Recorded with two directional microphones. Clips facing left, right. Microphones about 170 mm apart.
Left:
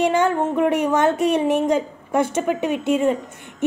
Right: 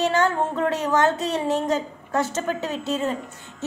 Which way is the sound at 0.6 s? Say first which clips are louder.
Left 3 dB; 15° left (ahead or behind).